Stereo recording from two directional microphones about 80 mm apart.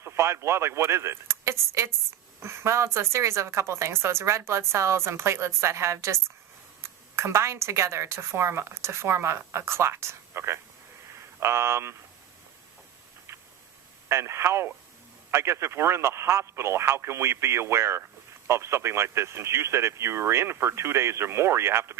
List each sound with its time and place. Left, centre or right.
0.0 s a woman's voice: right
14.1 s a woman's voice: right